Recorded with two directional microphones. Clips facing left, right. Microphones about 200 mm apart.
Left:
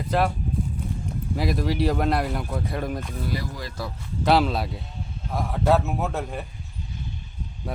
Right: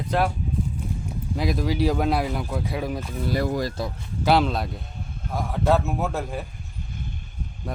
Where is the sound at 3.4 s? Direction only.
50° right (ahead or behind).